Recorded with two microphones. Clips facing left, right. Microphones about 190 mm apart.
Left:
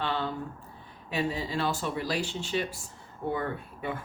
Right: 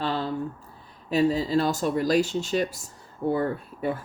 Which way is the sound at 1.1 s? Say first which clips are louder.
Right 9 dB; 40° right (ahead or behind).